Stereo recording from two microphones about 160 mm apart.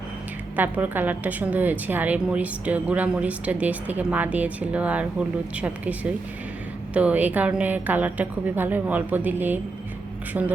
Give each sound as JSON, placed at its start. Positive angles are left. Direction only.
{"t": 0.5, "sound": "a woman's voice", "side_deg": -10}